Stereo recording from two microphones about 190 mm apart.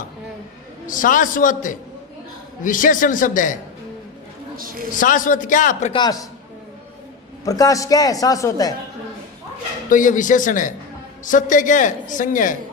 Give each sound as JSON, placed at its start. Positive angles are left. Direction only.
{"t": 0.9, "sound": "a man's voice", "side_deg": 45}
{"t": 4.5, "sound": "a man's voice", "side_deg": -50}
{"t": 4.9, "sound": "a man's voice", "side_deg": 45}
{"t": 5.9, "sound": "a man's voice", "side_deg": 25}
{"t": 7.4, "sound": "a man's voice", "side_deg": 20}
{"t": 9.9, "sound": "a man's voice", "side_deg": 45}